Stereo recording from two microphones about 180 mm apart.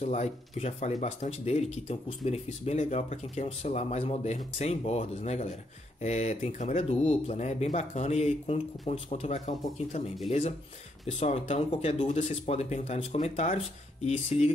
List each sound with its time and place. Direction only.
0.0 s speech: 40° left (ahead or behind)
11.1 s speech: 35° left (ahead or behind)